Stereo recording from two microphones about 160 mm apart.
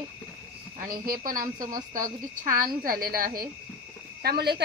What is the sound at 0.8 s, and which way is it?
A woman's voice, 60° right (ahead or behind).